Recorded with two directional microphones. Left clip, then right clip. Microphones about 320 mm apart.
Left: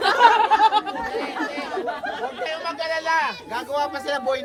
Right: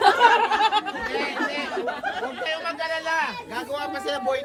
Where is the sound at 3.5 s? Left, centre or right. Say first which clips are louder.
Left 6 dB; centre.